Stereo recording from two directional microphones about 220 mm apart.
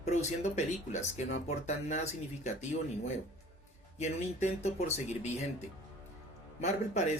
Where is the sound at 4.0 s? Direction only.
30° left (ahead or behind).